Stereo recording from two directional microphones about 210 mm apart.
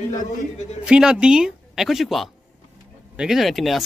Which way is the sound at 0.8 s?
5° right (ahead or behind).